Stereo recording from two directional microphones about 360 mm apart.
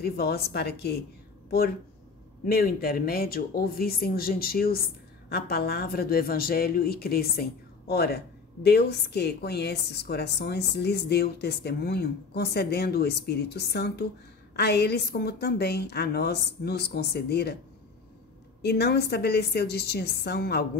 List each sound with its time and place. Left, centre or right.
0.0 s a woman's voice: left
2.4 s a woman's voice: left
18.6 s a woman's voice: left